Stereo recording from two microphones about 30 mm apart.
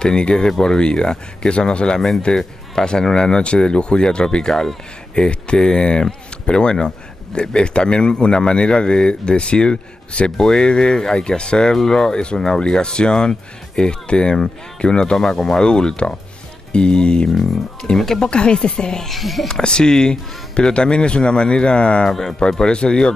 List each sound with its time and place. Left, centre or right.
0.0 s a man's voice: left
11.7 s speech: centre
12.1 s a man's voice: left
12.4 s a man's voice: left
17.9 s speech: centre
18.2 s a man's voice: left
19.0 s speech: centre
19.4 s a man's voice: left
22.0 s speech: centre
22.7 s a man's voice: left